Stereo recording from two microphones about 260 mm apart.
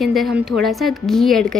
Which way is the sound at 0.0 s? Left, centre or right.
Centre.